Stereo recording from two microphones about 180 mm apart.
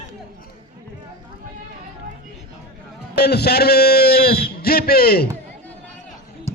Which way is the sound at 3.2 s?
65° left (ahead or behind).